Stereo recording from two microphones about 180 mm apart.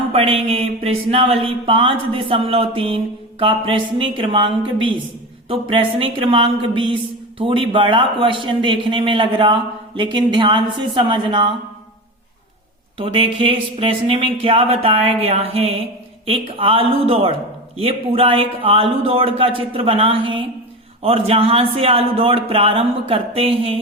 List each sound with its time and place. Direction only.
0.1 s speech: 35° right (ahead or behind)
13.0 s speech: 30° right (ahead or behind)